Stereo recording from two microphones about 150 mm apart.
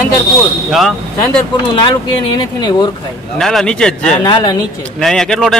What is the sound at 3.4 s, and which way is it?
Speech, 5° left (ahead or behind).